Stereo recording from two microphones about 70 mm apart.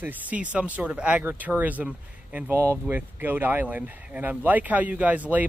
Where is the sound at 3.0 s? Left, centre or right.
Right.